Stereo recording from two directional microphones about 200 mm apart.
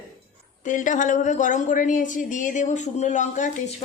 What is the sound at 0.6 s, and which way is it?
Speech, 40° left (ahead or behind).